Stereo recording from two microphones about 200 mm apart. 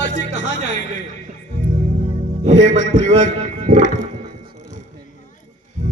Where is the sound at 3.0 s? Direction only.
40° right (ahead or behind).